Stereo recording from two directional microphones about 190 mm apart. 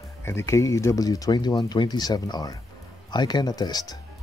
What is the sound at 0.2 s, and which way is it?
Speech, 15° left (ahead or behind).